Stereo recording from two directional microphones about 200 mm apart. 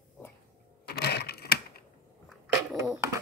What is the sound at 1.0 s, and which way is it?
Typewriter, 55° left (ahead or behind).